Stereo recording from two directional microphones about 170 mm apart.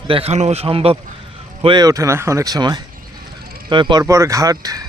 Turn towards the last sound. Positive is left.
turn(degrees=-20)  # may be behind; listen again after turning